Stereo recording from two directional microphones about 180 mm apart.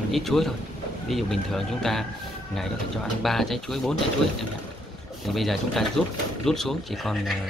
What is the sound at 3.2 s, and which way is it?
Speech, centre (ahead or behind).